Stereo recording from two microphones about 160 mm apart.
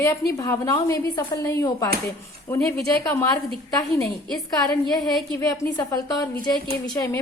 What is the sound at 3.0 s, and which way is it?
Speech, 20° left (ahead or behind).